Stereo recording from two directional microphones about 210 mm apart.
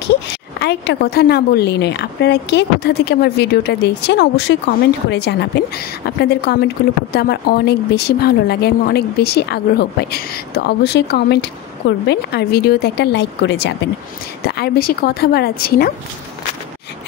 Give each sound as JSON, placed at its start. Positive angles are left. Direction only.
{"t": 0.6, "sound": "speech", "side_deg": 50}